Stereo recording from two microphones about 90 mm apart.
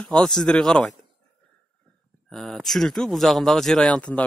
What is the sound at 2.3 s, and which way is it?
Speech, 5° left (ahead or behind).